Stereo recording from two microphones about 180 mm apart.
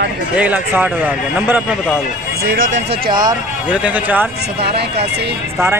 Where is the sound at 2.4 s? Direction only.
90° right.